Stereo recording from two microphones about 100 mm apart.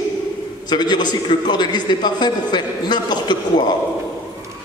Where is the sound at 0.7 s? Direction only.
45° left (ahead or behind).